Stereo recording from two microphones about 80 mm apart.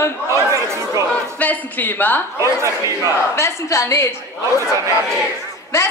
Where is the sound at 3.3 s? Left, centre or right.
Left.